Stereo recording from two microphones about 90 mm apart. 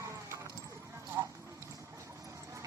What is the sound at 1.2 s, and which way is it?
Clip-clop, 40° right (ahead or behind).